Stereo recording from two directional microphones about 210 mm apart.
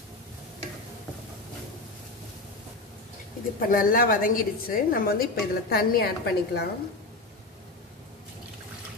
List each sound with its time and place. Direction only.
3.5 s a woman's voice: 40° left (ahead or behind)